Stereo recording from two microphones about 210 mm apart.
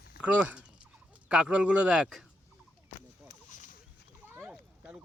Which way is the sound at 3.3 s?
40° left (ahead or behind).